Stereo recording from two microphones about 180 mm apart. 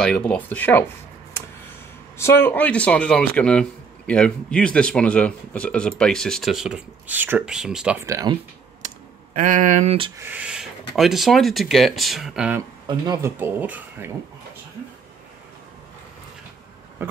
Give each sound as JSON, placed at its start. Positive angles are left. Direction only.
{"t": 0.0, "sound": "speech", "side_deg": 5}
{"t": 2.1, "sound": "speech", "side_deg": 15}
{"t": 8.1, "sound": "speech", "side_deg": -20}
{"t": 8.8, "sound": "computer keyboard", "side_deg": -45}
{"t": 10.1, "sound": "speech", "side_deg": -10}
{"t": 12.8, "sound": "speech", "side_deg": -20}
{"t": 17.0, "sound": "a sound", "side_deg": -15}